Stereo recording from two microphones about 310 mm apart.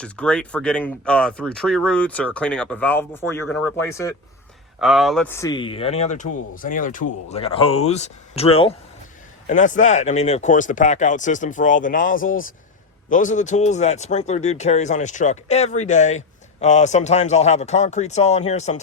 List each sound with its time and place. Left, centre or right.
0.0 s a man's voice: centre; by 18.8 s left